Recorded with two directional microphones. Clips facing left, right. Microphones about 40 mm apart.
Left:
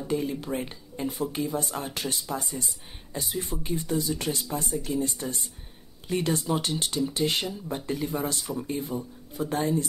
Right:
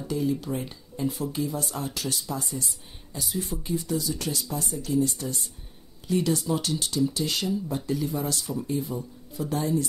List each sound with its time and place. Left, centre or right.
0.1 s speech: left